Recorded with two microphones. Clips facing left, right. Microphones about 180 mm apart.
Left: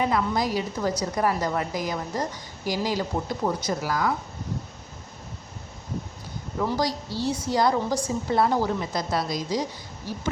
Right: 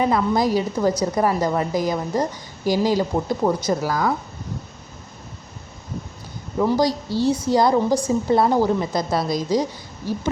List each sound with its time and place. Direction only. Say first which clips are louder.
0.0 s a woman's voice: right 5 dB; 30° right (ahead or behind)
6.6 s a woman's voice: right 7 dB; 20° right (ahead or behind)